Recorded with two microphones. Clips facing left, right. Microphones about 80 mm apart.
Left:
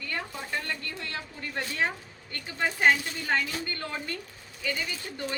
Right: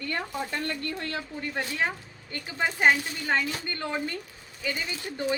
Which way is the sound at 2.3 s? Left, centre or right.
Centre.